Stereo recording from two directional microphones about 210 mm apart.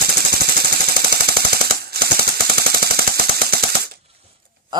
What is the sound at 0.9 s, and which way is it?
Machine gun, 45° right (ahead or behind).